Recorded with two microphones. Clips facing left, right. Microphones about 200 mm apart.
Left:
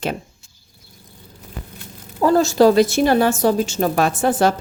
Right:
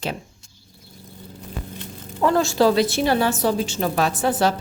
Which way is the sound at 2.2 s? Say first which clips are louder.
Left 4 dB; 40° left (ahead or behind).